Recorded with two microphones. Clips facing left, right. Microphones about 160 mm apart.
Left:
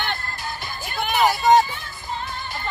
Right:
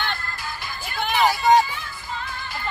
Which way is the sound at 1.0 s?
5° left (ahead or behind).